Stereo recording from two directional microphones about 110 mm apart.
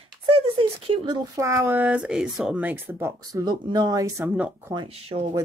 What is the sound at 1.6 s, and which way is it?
Speech, 15° right (ahead or behind).